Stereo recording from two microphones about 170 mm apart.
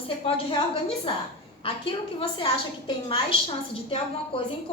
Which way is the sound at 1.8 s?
30° left (ahead or behind).